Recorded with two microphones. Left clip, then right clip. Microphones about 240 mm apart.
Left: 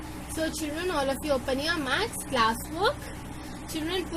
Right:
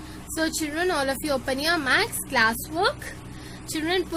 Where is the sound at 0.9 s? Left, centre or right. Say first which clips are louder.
Left 1 dB; right.